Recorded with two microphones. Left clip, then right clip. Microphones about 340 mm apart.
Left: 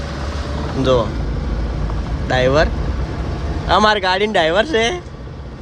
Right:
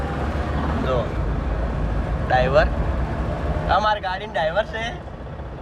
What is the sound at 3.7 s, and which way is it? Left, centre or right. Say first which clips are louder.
Speech: left 7 dB; centre.